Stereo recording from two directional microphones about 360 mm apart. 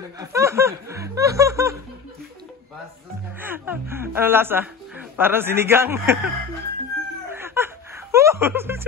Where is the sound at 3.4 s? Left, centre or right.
Centre.